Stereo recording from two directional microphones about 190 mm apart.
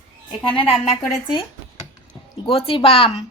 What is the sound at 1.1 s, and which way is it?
Speech, 25° left (ahead or behind).